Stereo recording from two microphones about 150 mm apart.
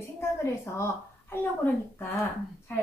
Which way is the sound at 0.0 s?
20° left (ahead or behind).